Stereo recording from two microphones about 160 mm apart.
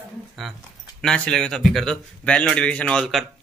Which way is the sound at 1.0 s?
5° left (ahead or behind).